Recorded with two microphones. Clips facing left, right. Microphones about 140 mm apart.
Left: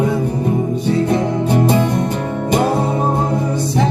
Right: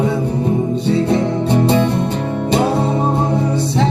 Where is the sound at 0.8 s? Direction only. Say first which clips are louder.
Right 1 dB; 10° left (ahead or behind).